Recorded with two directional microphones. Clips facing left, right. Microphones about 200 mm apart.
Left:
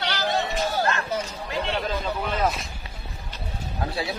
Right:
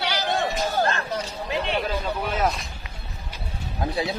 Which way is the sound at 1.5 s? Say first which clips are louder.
Right 2 dB; 15° right (ahead or behind).